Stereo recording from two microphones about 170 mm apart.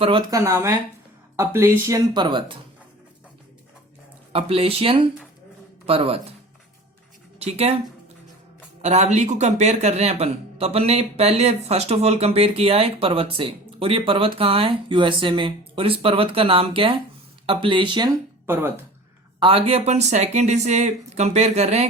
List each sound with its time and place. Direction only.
0.0 s speech: 30° right (ahead or behind)
4.3 s speech: 35° right (ahead or behind)
7.3 s speech: 35° right (ahead or behind)
8.8 s speech: 40° right (ahead or behind)
18.4 s speech: 15° right (ahead or behind)
19.4 s speech: 35° right (ahead or behind)